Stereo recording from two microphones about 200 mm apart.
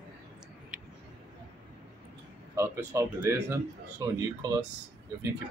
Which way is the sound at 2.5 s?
15° right (ahead or behind).